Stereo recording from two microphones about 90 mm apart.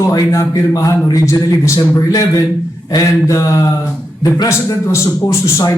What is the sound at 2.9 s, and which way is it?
A man's voice, 40° left (ahead or behind).